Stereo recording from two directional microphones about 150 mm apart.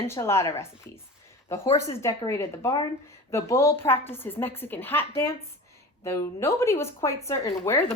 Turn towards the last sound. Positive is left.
turn(degrees=20)  # may be behind; listen again after turning